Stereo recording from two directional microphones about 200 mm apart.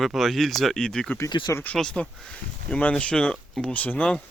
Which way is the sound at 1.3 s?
20° left (ahead or behind).